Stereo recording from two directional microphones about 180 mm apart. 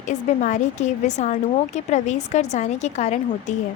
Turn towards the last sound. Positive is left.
turn(degrees=40)  # may be behind; listen again after turning